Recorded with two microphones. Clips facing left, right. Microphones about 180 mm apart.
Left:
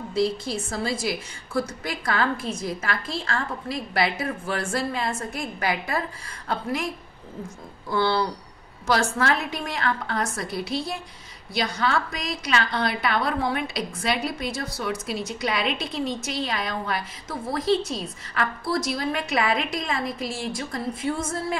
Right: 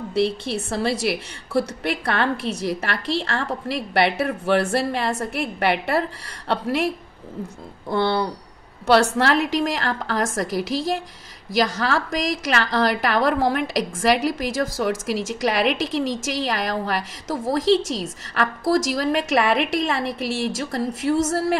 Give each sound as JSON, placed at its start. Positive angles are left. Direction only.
{"t": 0.1, "sound": "a woman's voice", "side_deg": -65}
{"t": 7.9, "sound": "speech", "side_deg": -20}
{"t": 9.2, "sound": "a woman's voice", "side_deg": -85}